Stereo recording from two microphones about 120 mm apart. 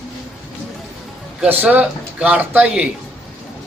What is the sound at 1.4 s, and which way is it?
Speech, 10° right (ahead or behind).